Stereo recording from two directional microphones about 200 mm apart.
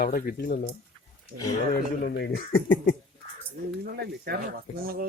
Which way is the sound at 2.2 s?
50° left (ahead or behind).